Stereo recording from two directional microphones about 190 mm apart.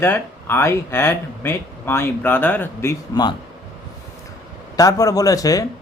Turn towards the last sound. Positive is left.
turn(degrees=20)  # may be behind; listen again after turning